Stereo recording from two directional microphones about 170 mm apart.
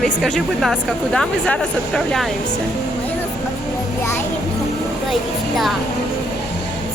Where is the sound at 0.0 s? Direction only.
Centre (ahead or behind).